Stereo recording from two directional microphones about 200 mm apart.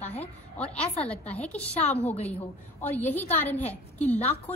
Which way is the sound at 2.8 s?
10° left (ahead or behind).